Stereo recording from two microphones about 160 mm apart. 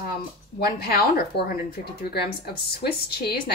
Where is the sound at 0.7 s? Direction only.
75° left (ahead or behind).